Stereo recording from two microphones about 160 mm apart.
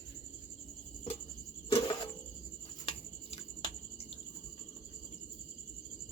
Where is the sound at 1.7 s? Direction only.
30° left (ahead or behind).